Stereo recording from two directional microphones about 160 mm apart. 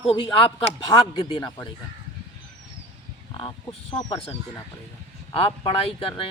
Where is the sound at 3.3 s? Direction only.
35° left (ahead or behind).